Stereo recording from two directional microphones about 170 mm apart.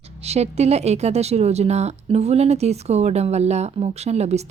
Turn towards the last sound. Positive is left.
turn(degrees=-40)  # may be behind; listen again after turning